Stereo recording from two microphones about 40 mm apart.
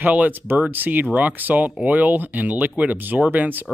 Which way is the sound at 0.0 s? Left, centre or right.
Right.